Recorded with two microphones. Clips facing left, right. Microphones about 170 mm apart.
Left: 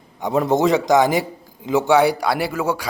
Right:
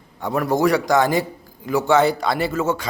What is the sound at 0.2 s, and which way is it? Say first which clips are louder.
A man's voice: left 2 dB; 20° left (ahead or behind).